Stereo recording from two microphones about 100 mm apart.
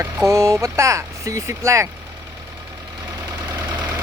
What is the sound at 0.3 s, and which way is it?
Speech, 30° right (ahead or behind).